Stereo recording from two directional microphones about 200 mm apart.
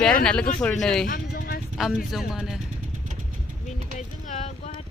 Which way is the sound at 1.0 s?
45° left (ahead or behind).